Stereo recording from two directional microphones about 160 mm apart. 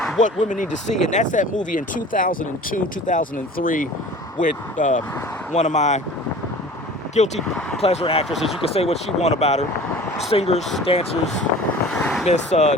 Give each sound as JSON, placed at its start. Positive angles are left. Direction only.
{"t": 0.2, "sound": "speech", "side_deg": 50}
{"t": 7.3, "sound": "speech", "side_deg": 5}
{"t": 7.8, "sound": "speech", "side_deg": 40}
{"t": 11.9, "sound": "vehicle", "side_deg": 5}
{"t": 12.3, "sound": "speech", "side_deg": 45}